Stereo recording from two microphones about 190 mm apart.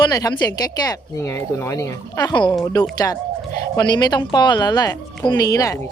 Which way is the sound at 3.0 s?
15° left (ahead or behind).